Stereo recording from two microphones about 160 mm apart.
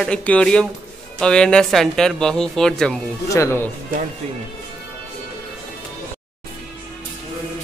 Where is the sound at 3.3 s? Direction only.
20° left (ahead or behind).